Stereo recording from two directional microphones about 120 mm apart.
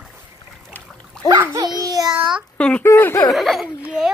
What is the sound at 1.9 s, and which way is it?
Child singing, 30° right (ahead or behind).